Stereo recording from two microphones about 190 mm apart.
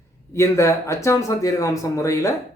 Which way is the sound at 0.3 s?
15° left (ahead or behind).